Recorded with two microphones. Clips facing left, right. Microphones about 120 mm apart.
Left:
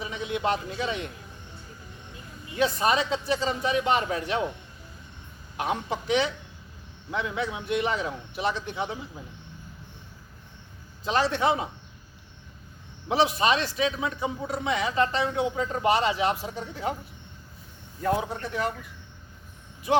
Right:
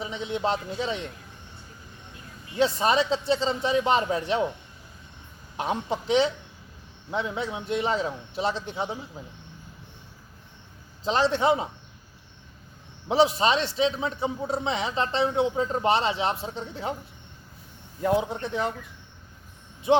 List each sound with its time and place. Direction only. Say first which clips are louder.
0.0 s a man's voice: right 1 dB; 25° right (ahead or behind)
2.6 s a man's voice: right 2 dB; 30° right (ahead or behind)
5.6 s a man's voice: right 1 dB; 30° right (ahead or behind)
11.0 s a man's voice: right 2 dB; 25° right (ahead or behind)
13.1 s a man's voice: right 2 dB; 30° right (ahead or behind)
18.2 s a man's voice: right 2 dB; 25° right (ahead or behind)